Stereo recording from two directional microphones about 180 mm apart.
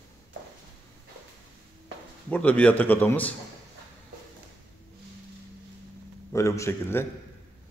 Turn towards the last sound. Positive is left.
turn(degrees=15)  # may be behind; listen again after turning